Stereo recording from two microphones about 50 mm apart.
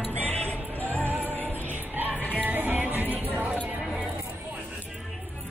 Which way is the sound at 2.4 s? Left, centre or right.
Right.